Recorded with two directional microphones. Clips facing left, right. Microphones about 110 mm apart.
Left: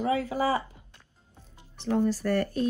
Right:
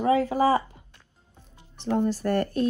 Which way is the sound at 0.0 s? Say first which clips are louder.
Right 5 dB; 45° right (ahead or behind).